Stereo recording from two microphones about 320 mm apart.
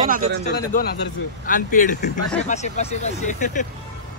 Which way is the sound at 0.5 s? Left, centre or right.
Left.